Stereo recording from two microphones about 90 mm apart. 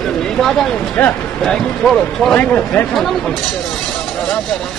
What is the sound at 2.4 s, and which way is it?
Speech, 15° left (ahead or behind).